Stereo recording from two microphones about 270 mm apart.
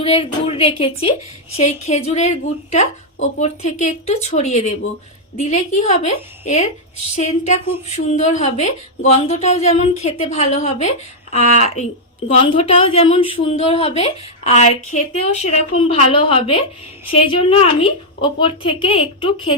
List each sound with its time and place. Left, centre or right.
0.0 s a woman's voice: left